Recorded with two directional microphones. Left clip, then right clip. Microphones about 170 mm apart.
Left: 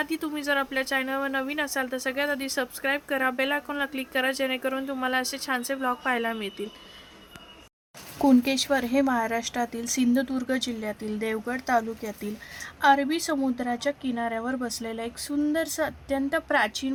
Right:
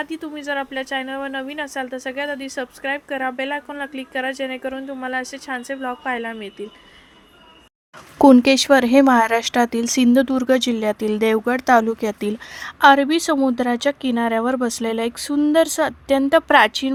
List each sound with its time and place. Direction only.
0.0 s speech: centre (ahead or behind)
8.2 s speech: 45° right (ahead or behind)